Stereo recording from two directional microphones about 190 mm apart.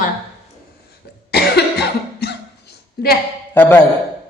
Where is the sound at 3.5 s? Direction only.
10° left (ahead or behind).